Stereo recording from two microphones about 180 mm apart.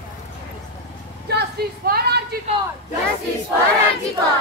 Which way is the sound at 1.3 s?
65° right (ahead or behind).